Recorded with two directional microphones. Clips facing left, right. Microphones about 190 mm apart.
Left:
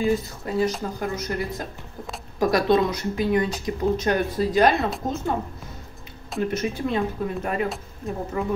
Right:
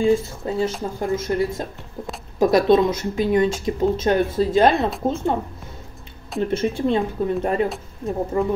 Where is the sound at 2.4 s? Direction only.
25° right (ahead or behind).